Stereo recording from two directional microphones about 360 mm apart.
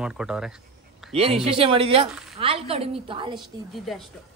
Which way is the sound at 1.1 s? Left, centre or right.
Centre.